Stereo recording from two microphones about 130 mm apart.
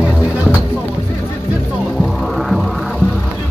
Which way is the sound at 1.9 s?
Centre (ahead or behind).